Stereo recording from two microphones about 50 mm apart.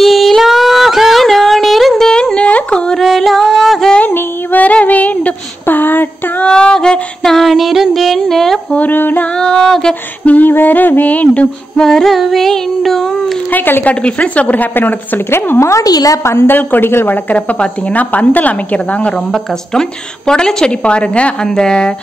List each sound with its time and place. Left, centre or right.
0.0 s a sound: centre
2.3 s a sound: left
3.0 s singing: centre
4.0 s female singing: left
6.4 s a sound: centre
8.7 s a woman's voice: left
9.4 s a woman's voice: centre
10.2 s a woman's voice: left
11.8 s a woman's voice: centre
12.1 s carnatic music: centre
13.5 s a woman's voice: left
13.8 s a woman's voice: left
17.3 s a woman's voice: left
19.7 s a woman's voice: centre